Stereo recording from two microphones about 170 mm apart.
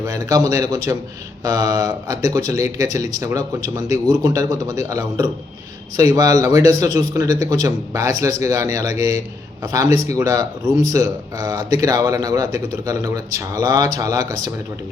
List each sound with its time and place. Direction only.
0.0 s speech: 20° right (ahead or behind)